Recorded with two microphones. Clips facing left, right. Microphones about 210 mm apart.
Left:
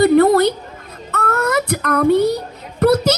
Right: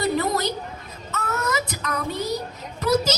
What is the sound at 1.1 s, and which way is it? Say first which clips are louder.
Child singing: left 8 dB; 60° left (ahead or behind).